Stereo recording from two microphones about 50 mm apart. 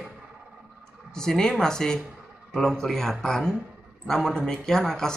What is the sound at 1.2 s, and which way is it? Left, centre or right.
Speech, centre.